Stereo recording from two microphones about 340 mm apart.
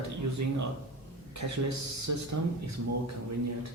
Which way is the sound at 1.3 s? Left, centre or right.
Right.